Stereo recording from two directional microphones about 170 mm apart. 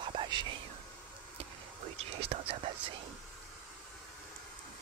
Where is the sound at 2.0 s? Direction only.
35° right (ahead or behind).